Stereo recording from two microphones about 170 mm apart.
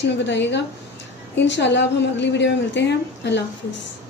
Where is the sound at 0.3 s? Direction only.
90° left.